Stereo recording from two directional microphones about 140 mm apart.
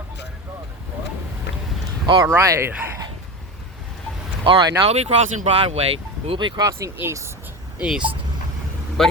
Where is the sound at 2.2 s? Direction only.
15° right (ahead or behind).